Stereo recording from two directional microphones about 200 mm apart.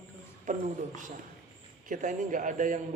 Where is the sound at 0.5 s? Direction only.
40° right (ahead or behind).